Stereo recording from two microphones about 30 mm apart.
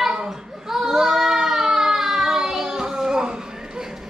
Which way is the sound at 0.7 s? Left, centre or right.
Centre.